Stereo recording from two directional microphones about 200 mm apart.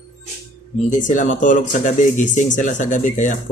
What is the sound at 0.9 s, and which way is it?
Speech, 40° left (ahead or behind).